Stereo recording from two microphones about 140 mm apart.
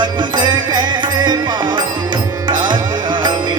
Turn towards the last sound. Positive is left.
turn(degrees=-30)  # may be behind; listen again after turning